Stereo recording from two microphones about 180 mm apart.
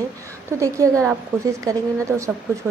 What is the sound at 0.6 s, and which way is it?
A woman's voice, 20° right (ahead or behind).